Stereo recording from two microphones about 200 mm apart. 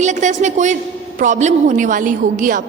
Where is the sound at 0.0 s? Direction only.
35° right (ahead or behind).